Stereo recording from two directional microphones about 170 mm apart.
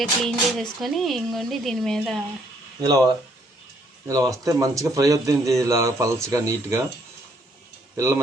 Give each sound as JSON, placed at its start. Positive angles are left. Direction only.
{"t": 0.0, "sound": "speech", "side_deg": 5}
{"t": 4.1, "sound": "a man's voice", "side_deg": -20}
{"t": 7.9, "sound": "speech", "side_deg": -15}